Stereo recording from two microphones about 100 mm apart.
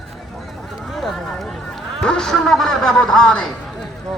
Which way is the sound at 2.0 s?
5° left (ahead or behind).